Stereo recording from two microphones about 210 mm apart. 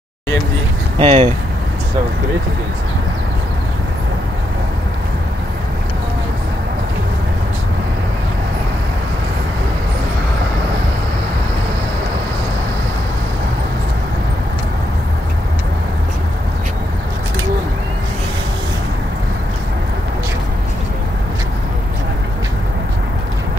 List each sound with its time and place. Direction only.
0.9 s speech: 25° right (ahead or behind)